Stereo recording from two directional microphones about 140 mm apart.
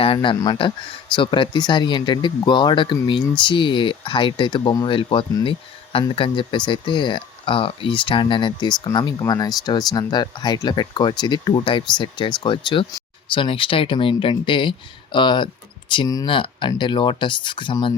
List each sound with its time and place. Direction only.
0.0 s speech: 40° left (ahead or behind)